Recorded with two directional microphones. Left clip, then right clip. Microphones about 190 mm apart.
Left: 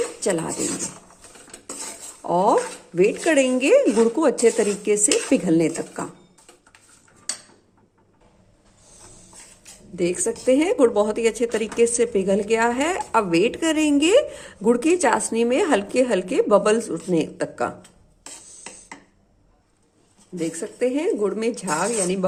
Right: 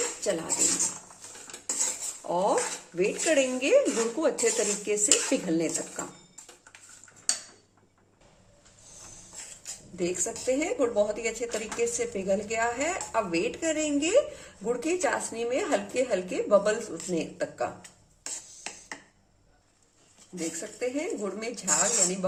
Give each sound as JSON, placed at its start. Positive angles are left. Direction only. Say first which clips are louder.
{"t": 0.2, "sound": "speech", "louder": "left 7 dB", "side_deg": 35}
{"t": 2.2, "sound": "speech", "louder": "left 8 dB", "side_deg": 35}
{"t": 9.9, "sound": "speech", "louder": "left 8 dB", "side_deg": 35}
{"t": 20.6, "sound": "speech", "louder": "left 9 dB", "side_deg": 45}